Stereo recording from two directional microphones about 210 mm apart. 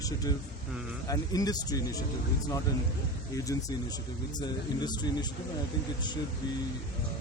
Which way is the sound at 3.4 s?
15° left (ahead or behind).